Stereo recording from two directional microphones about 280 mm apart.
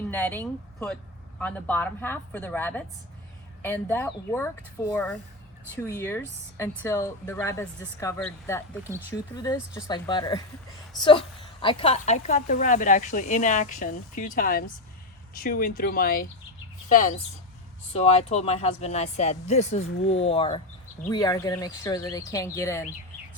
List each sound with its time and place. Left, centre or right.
0.1 s speech: centre
8.8 s speech: centre
9.0 s a woman's voice: centre